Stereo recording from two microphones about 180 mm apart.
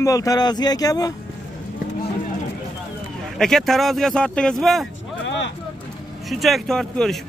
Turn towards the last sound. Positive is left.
turn(degrees=5)  # may be behind; listen again after turning